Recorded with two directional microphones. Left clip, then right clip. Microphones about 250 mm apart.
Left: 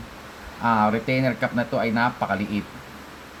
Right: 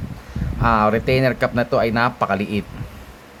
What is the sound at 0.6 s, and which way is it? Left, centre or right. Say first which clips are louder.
Speech: right 4 dB; right.